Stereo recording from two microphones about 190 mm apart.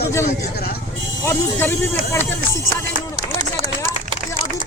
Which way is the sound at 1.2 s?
15° left (ahead or behind).